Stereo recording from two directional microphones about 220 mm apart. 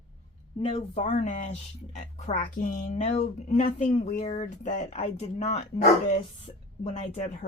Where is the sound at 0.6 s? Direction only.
30° left (ahead or behind).